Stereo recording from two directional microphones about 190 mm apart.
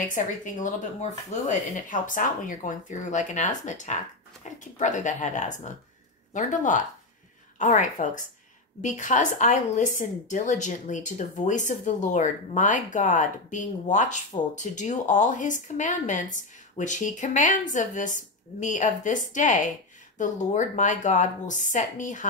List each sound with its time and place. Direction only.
0.1 s a woman's voice: 40° left (ahead or behind)